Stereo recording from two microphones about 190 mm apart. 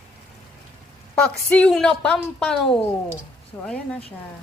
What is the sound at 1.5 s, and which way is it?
A woman's voice, 5° left (ahead or behind).